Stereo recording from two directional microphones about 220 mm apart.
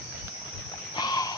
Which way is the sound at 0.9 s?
20° left (ahead or behind).